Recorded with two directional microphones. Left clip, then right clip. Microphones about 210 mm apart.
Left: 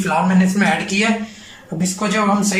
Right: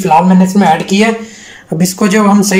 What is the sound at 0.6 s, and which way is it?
Speech, 30° right (ahead or behind).